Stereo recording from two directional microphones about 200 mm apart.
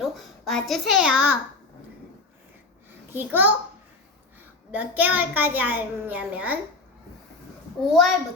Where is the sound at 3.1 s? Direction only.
10° right (ahead or behind).